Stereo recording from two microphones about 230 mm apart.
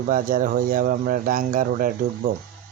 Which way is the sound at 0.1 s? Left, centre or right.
Right.